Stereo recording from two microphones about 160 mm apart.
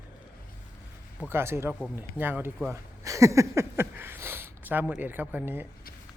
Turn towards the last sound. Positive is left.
turn(degrees=-10)  # may be behind; listen again after turning